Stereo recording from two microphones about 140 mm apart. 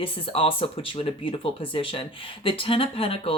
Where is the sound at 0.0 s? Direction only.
40° left (ahead or behind).